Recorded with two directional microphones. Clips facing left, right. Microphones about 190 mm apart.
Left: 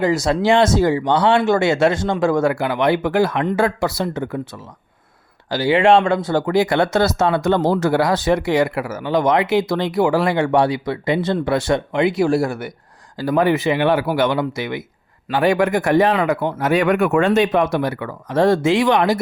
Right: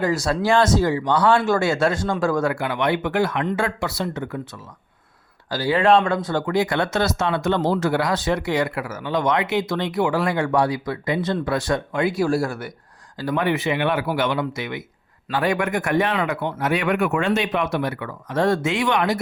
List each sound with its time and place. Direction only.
0.0 s speech: 20° left (ahead or behind)
5.5 s speech: 25° left (ahead or behind)
13.1 s speech: 35° left (ahead or behind)